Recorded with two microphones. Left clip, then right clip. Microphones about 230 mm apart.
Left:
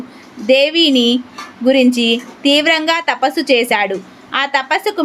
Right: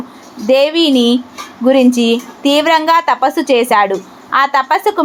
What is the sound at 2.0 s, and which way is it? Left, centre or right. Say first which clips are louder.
Speech: right 2 dB; left.